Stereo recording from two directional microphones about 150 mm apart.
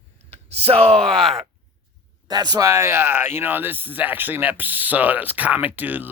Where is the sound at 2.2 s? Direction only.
25° right (ahead or behind).